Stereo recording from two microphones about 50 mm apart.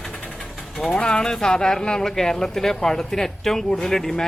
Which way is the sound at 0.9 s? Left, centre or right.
Centre.